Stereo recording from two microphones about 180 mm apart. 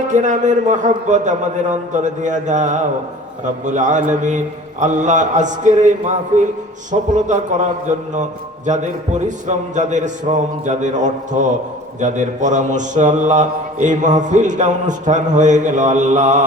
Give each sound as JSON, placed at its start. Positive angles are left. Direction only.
{"t": 0.1, "sound": "a man's voice", "side_deg": -45}